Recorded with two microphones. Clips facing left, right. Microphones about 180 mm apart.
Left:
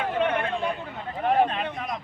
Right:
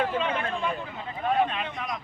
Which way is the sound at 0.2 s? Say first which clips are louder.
Left 4 dB; 60° left (ahead or behind).